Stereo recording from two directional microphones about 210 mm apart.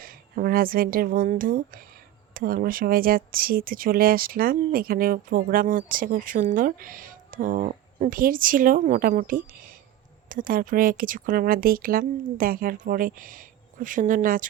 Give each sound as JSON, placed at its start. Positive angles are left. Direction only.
{"t": 0.0, "sound": "speech", "side_deg": -45}